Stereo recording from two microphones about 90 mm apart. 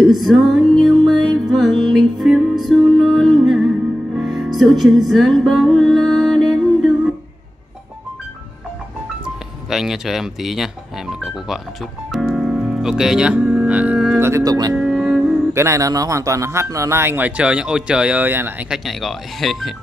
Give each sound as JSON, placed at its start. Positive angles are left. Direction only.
{"t": 0.0, "sound": "music", "side_deg": 0}
{"t": 9.7, "sound": "speech", "side_deg": -5}
{"t": 12.1, "sound": "music", "side_deg": -5}
{"t": 14.4, "sound": "speech", "side_deg": -45}
{"t": 14.7, "sound": "music", "side_deg": -5}
{"t": 15.5, "sound": "speech", "side_deg": -35}
{"t": 18.7, "sound": "speech", "side_deg": 0}